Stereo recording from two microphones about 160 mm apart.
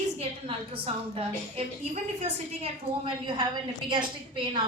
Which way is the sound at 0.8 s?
40° right (ahead or behind).